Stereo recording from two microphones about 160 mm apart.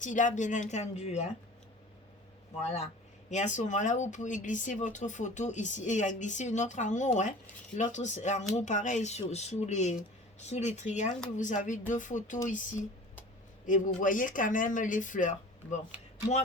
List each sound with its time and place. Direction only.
0.0 s speech: 55° left (ahead or behind)
2.6 s speech: 45° left (ahead or behind)
13.7 s speech: 55° left (ahead or behind)